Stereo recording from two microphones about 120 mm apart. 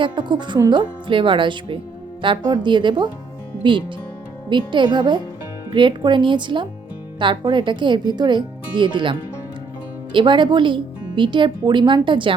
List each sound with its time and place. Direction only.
0.0 s speech: 40° right (ahead or behind)